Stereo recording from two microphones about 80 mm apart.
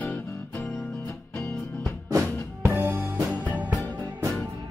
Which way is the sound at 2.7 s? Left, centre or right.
Right.